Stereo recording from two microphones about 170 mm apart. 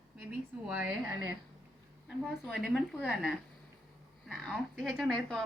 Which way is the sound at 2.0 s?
Centre (ahead or behind).